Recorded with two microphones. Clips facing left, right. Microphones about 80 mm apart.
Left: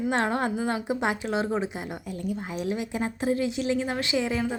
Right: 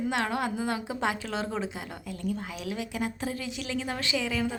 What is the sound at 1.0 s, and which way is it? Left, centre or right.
A woman's voice, left.